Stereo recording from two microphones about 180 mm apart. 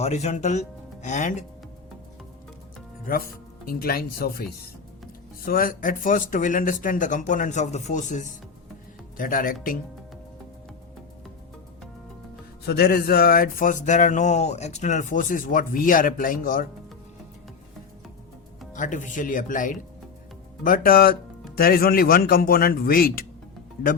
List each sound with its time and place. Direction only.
0.0 s speech: 40° left (ahead or behind)
3.1 s speech: 55° left (ahead or behind)
12.6 s speech: 60° left (ahead or behind)
18.7 s speech: 45° left (ahead or behind)